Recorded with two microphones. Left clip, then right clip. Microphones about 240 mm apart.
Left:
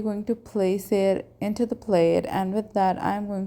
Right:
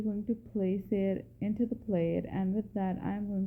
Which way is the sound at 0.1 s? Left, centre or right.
Left.